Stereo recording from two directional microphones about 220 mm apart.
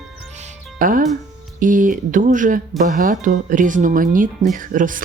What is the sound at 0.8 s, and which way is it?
Speech, 40° right (ahead or behind).